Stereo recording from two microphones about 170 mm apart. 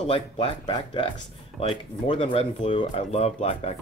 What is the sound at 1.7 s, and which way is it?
Speech, 30° left (ahead or behind).